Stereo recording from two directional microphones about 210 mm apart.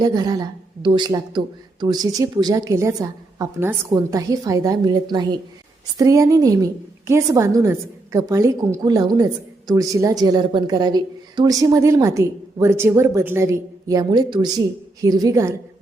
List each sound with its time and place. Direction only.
0.0 s a woman's voice: 20° right (ahead or behind)